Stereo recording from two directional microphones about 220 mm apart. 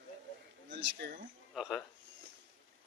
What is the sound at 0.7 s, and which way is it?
Speech, 50° right (ahead or behind).